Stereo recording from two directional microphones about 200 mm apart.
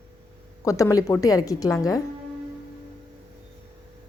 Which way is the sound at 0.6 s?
15° left (ahead or behind).